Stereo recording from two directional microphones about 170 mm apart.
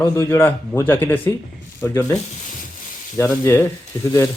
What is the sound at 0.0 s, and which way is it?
Speech, 15° left (ahead or behind).